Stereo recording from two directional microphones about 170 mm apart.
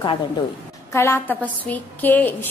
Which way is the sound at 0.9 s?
15° left (ahead or behind).